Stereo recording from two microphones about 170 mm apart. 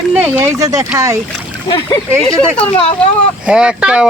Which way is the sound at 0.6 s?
20° right (ahead or behind).